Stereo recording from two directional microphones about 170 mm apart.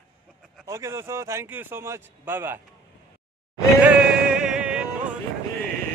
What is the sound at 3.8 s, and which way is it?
Music, 5° right (ahead or behind).